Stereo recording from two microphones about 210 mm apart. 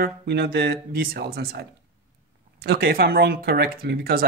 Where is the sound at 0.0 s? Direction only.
50° right (ahead or behind).